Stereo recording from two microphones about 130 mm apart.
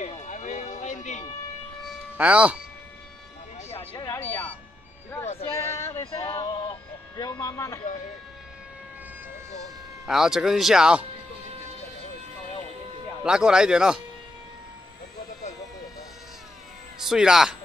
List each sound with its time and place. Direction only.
0.0 s a sound: 70° left (ahead or behind)
2.1 s speech: 10° right (ahead or behind)
3.7 s music: 40° left (ahead or behind)
5.5 s a sound: 20° left (ahead or behind)
10.0 s speech: 5° right (ahead or behind)
13.2 s speech: 5° right (ahead or behind)
17.0 s speech: 5° right (ahead or behind)